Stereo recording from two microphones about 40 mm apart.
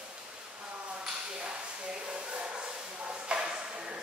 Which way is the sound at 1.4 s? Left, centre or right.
Right.